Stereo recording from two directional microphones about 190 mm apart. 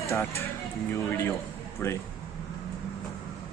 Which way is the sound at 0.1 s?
15° left (ahead or behind).